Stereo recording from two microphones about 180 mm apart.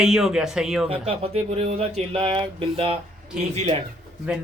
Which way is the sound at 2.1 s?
25° right (ahead or behind).